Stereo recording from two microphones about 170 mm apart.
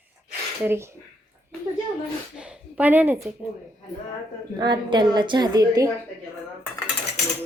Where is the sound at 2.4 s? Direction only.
5° right (ahead or behind).